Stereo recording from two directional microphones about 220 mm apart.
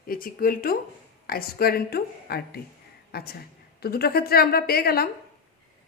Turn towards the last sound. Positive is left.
turn(degrees=45)  # may be behind; listen again after turning